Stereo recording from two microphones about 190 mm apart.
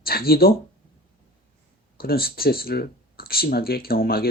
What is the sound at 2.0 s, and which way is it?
Speech, 55° left (ahead or behind).